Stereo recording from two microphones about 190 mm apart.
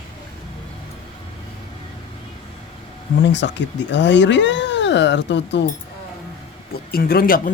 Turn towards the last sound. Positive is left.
turn(degrees=50)  # may be behind; listen again after turning